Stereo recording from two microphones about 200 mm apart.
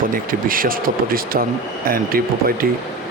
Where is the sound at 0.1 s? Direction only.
45° right (ahead or behind).